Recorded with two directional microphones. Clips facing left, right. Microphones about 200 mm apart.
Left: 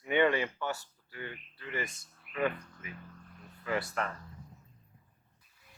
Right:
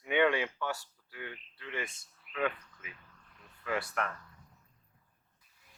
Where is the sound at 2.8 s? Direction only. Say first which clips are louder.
Left 5 dB; 45° left (ahead or behind).